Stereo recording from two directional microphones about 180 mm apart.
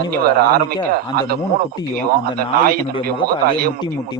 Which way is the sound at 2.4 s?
55° right (ahead or behind).